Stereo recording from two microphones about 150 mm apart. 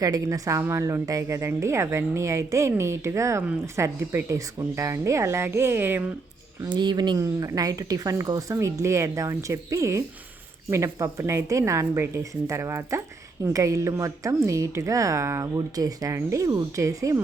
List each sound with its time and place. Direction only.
0.0 s a woman's voice: 25° right (ahead or behind)
6.7 s a woman's voice: 30° right (ahead or behind)